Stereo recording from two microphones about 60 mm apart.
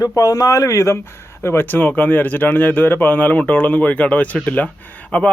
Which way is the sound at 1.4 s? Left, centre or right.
Left.